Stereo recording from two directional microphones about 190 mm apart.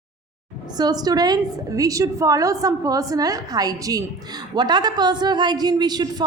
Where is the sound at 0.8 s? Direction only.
20° right (ahead or behind).